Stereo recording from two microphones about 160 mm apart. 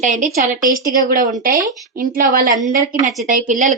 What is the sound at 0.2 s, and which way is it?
A woman's voice, 55° right (ahead or behind).